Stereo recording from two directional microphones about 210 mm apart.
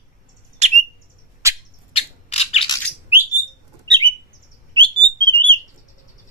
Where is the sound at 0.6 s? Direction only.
35° right (ahead or behind).